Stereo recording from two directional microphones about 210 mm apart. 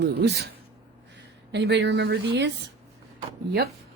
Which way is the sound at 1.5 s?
55° right (ahead or behind).